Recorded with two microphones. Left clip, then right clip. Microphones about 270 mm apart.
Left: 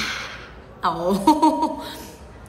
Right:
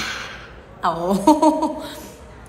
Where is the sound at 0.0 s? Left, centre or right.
Centre.